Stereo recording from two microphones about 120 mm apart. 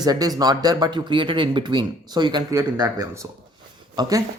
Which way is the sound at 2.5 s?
30° right (ahead or behind).